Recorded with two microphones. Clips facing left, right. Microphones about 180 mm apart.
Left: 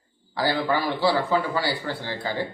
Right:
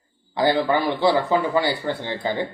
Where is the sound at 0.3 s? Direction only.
20° right (ahead or behind).